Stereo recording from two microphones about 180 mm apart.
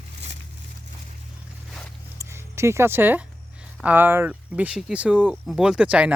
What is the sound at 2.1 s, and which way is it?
Speech, 15° right (ahead or behind).